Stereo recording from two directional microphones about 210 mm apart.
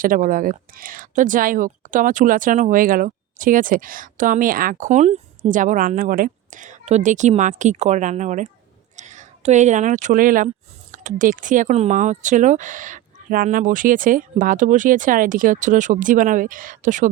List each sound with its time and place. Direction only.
0.0 s speech: 40° right (ahead or behind)